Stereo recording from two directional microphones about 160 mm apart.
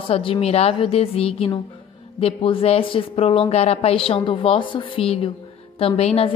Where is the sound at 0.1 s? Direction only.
35° left (ahead or behind).